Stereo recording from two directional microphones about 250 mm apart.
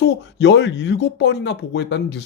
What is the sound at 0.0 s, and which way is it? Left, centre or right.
Speech, left.